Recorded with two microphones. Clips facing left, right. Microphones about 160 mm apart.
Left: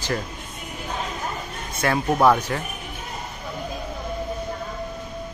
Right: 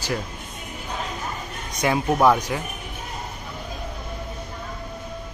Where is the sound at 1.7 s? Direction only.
15° right (ahead or behind).